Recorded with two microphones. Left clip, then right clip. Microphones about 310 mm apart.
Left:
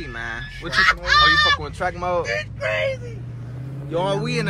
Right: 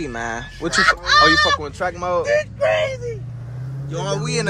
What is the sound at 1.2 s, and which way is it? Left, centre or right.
Speech, centre.